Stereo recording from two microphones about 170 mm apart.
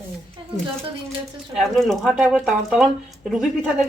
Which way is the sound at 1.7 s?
Centre (ahead or behind).